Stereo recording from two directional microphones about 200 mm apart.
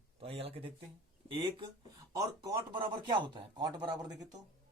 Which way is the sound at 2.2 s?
20° right (ahead or behind).